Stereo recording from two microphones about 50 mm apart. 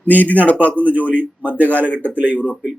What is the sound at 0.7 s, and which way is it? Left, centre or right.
A man's voice, right.